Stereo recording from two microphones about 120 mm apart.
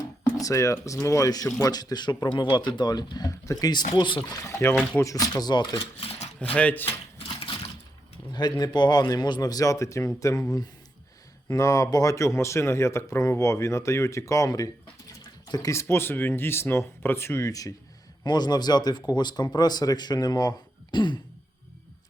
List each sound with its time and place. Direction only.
0.3 s speech: 25° left (ahead or behind)
4.9 s speech: 30° left (ahead or behind)
6.4 s speech: 10° left (ahead or behind)
7.2 s a sound: 45° left (ahead or behind)
8.3 s speech: 35° left (ahead or behind)